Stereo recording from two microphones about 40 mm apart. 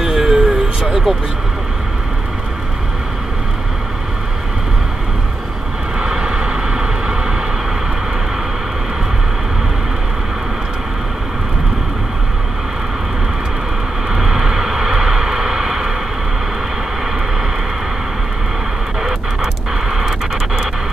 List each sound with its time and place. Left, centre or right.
0.0 s a sound: centre
5.9 s vehicle: right
14.1 s vehicle: centre
19.0 s radio: centre